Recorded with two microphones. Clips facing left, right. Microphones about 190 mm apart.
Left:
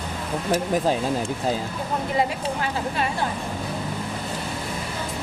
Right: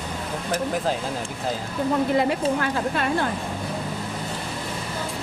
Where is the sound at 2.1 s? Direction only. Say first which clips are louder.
Right 3 dB; 60° right (ahead or behind).